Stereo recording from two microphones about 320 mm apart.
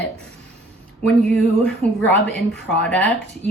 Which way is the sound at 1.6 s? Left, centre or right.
Centre.